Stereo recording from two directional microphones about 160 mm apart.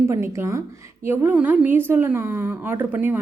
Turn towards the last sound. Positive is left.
turn(degrees=-10)  # may be behind; listen again after turning